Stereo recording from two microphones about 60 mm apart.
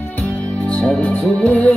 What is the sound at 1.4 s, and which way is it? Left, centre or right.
Music, left.